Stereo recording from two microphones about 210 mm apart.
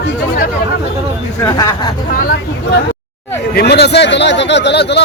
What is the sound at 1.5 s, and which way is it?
Speech, 20° left (ahead or behind).